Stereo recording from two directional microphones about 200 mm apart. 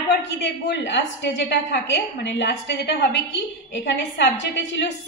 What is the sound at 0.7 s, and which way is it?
A woman's voice, 60° left (ahead or behind).